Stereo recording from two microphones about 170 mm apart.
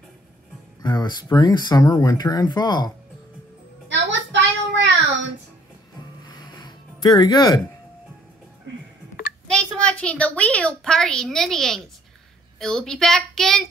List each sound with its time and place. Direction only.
0.8 s speech: 25° left (ahead or behind)
3.9 s a sound: 90° right
6.2 s music: 25° left (ahead or behind)
9.5 s a woman's voice: 5° left (ahead or behind)